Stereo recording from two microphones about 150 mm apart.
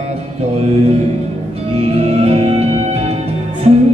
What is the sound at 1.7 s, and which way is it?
Music, 40° right (ahead or behind).